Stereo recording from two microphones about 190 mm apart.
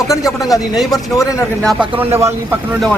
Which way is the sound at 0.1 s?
20° left (ahead or behind).